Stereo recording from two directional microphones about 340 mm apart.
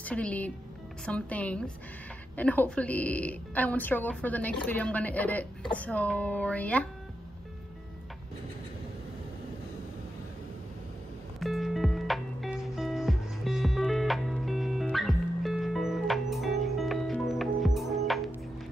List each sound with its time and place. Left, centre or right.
0.0 s speech: centre
11.3 s music: centre